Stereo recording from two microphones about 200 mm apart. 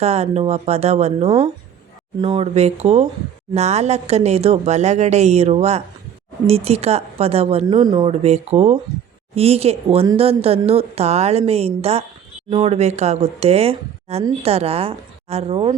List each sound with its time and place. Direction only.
0.0 s a woman's voice: 35° right (ahead or behind)